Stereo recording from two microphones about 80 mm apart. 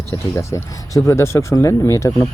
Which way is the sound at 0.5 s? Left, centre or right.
Left.